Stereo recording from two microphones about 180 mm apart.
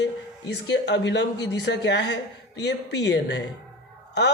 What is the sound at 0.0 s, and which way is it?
Speech, 70° left (ahead or behind).